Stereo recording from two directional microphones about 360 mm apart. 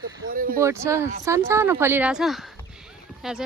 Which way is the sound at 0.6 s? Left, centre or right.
Centre.